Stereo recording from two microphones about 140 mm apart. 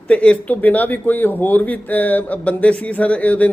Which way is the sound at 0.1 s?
10° left (ahead or behind).